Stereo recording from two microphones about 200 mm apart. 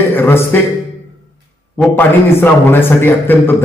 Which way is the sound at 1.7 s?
10° left (ahead or behind).